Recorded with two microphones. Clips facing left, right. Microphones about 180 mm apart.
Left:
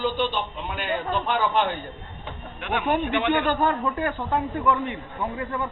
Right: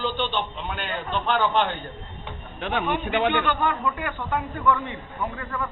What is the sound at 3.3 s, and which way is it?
Speech, 40° left (ahead or behind).